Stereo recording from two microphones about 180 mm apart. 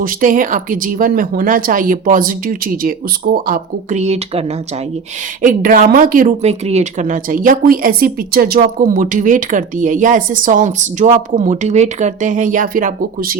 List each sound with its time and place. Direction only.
0.0 s speech: 50° right (ahead or behind)
5.4 s speech: 50° right (ahead or behind)